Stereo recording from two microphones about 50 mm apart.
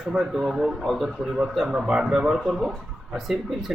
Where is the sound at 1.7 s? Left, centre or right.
Centre.